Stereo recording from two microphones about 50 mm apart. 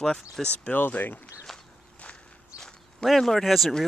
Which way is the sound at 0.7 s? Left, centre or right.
Left.